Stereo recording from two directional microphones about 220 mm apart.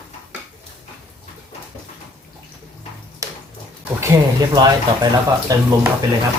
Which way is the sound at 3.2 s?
15° right (ahead or behind).